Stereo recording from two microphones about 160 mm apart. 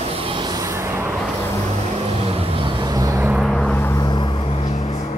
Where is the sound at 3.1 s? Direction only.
10° right (ahead or behind).